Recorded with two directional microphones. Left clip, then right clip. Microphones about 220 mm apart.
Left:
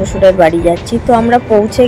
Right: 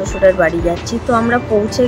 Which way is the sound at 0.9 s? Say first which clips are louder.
Left 4 dB; 10° left (ahead or behind).